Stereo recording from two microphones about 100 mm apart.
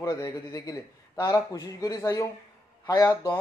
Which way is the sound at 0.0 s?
35° left (ahead or behind).